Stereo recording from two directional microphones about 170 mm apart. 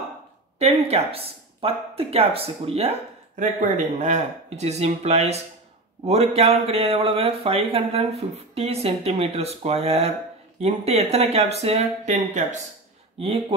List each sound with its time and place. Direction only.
0.6 s speech: 35° right (ahead or behind)